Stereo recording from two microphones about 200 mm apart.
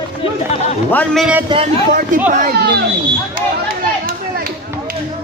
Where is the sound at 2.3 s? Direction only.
45° right (ahead or behind).